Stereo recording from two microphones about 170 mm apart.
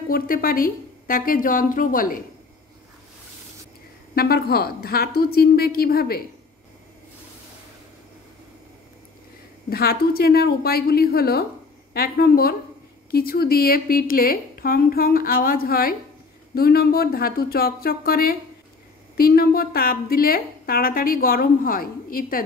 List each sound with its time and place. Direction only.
0.1 s a woman's voice: 60° left (ahead or behind)
4.1 s a woman's voice: 65° left (ahead or behind)
9.7 s a woman's voice: 65° left (ahead or behind)